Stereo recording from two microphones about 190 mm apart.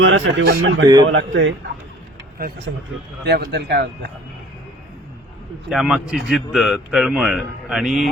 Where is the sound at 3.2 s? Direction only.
60° right (ahead or behind).